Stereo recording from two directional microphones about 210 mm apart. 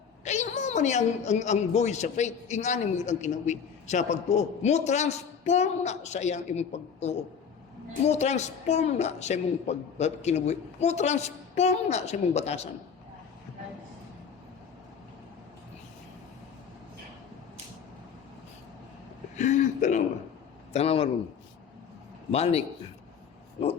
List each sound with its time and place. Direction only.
0.3 s a woman's voice: 35° left (ahead or behind)
19.4 s a woman's voice: 35° left (ahead or behind)
22.3 s a man's voice: 30° left (ahead or behind)